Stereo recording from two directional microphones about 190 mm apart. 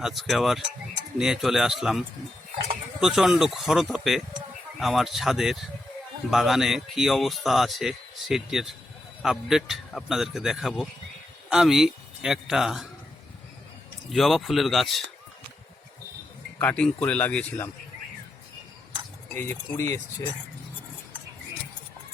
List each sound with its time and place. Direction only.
0.0 s a man's voice: centre (ahead or behind)
14.1 s a man's voice: centre (ahead or behind)
16.6 s speech: 5° left (ahead or behind)
19.3 s speech: 15° left (ahead or behind)